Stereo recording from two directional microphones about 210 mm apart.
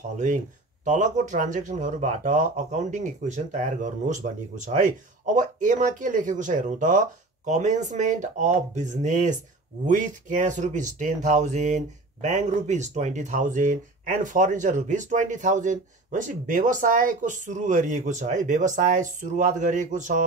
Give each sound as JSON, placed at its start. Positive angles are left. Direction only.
{"t": 0.8, "sound": "speech", "side_deg": -35}